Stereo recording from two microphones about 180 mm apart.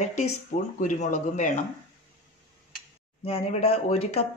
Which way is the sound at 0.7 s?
40° left (ahead or behind).